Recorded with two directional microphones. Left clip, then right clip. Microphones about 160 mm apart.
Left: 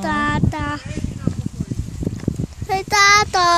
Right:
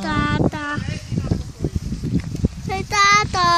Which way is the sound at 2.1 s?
50° left (ahead or behind).